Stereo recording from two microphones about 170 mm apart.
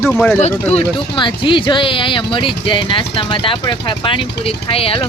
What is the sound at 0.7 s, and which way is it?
Speech, 30° left (ahead or behind).